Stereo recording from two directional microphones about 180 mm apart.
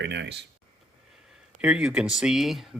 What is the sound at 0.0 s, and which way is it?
Speech, 75° right (ahead or behind).